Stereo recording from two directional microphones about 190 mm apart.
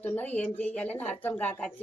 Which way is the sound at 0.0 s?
10° left (ahead or behind).